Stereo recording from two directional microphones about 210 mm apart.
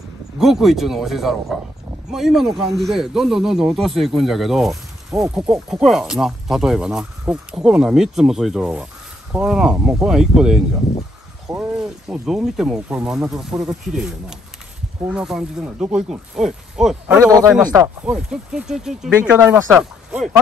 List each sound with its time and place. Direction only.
0.4 s speech: centre (ahead or behind)
17.2 s speech: 15° right (ahead or behind)